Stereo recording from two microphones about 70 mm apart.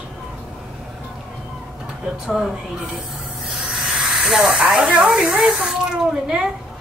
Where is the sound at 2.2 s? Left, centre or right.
Centre.